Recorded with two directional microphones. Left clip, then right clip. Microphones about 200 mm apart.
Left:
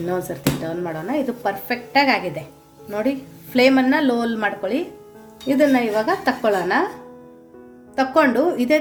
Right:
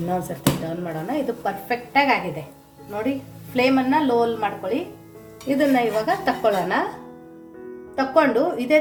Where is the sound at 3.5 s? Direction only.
45° left (ahead or behind).